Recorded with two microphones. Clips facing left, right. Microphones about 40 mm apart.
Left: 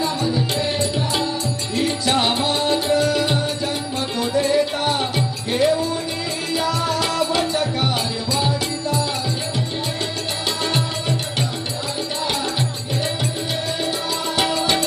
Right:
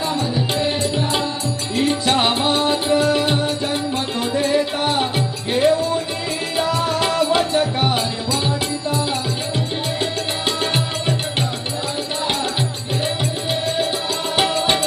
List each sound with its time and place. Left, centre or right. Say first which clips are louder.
0.2 s music: right 1 dB; centre